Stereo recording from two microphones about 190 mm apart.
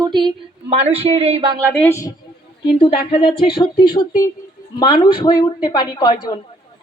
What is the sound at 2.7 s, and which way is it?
A woman's voice, 30° left (ahead or behind).